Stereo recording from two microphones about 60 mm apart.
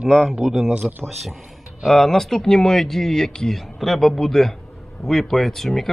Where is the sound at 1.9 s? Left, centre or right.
Centre.